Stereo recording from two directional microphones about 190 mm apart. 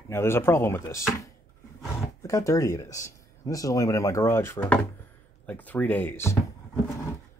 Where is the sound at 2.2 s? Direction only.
15° left (ahead or behind).